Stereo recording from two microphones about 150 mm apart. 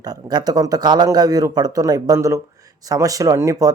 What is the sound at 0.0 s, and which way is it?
Speech, 25° right (ahead or behind).